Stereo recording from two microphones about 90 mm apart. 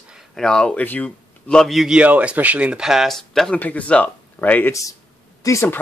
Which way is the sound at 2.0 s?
15° right (ahead or behind).